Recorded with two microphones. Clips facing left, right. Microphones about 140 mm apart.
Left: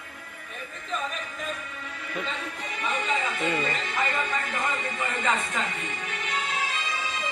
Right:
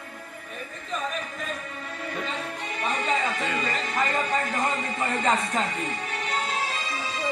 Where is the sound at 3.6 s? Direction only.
40° right (ahead or behind).